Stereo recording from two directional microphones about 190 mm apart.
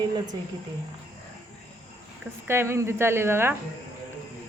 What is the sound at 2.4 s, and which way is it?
A woman's voice, 15° right (ahead or behind).